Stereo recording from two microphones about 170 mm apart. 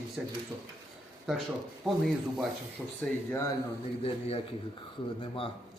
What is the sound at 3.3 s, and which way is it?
Speech, 15° left (ahead or behind).